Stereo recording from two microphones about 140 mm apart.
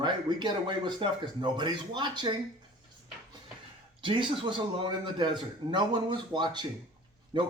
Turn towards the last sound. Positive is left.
turn(degrees=-35)  # may be behind; listen again after turning